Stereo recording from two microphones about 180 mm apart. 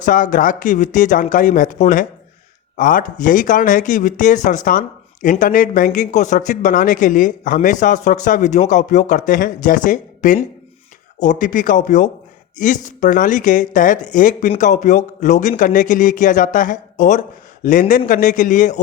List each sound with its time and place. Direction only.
0.0 s speech: 45° left (ahead or behind)